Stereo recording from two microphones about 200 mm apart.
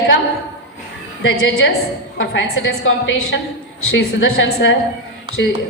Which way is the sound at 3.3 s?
65° left (ahead or behind).